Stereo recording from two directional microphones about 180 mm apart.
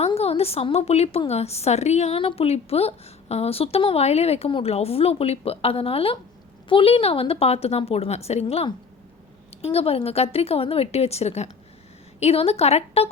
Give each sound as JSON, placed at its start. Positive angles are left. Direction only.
{"t": 0.0, "sound": "a woman's voice", "side_deg": 35}